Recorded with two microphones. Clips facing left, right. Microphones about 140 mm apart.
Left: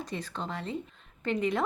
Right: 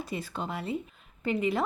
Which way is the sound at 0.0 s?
10° right (ahead or behind).